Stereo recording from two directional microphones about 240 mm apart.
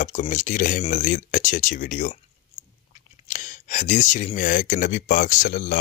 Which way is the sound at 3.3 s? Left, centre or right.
Left.